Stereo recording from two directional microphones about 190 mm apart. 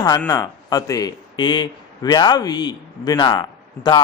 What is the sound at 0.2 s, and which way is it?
Speech, 15° left (ahead or behind).